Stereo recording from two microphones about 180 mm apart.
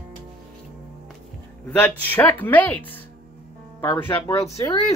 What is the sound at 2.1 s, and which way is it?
Speech, 10° left (ahead or behind).